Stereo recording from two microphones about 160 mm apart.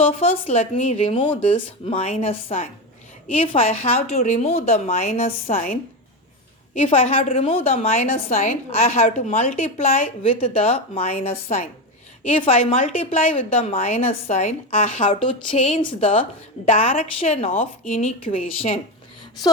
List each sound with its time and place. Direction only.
0.0 s a woman's voice: 40° left (ahead or behind)
6.8 s a woman's voice: 35° left (ahead or behind)